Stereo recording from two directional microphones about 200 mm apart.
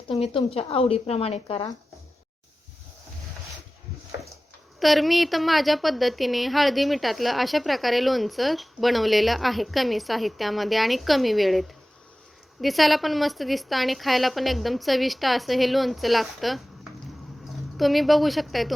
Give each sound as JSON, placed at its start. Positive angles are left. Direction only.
{"t": 0.1, "sound": "speech", "side_deg": 30}
{"t": 4.8, "sound": "a woman's voice", "side_deg": 0}
{"t": 12.6, "sound": "a woman's voice", "side_deg": 0}
{"t": 17.7, "sound": "a woman's voice", "side_deg": 0}